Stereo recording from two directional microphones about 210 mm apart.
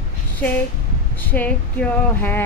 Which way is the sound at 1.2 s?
10° left (ahead or behind).